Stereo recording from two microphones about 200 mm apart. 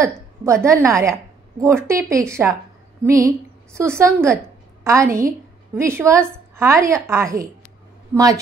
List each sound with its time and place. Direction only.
0.4 s a woman's voice: 15° right (ahead or behind)